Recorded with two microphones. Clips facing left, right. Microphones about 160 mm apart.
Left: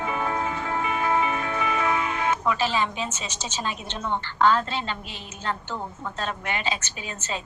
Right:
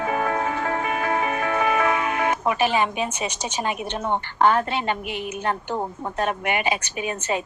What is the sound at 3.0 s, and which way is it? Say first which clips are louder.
A woman's voice: right 5 dB; 60° right (ahead or behind).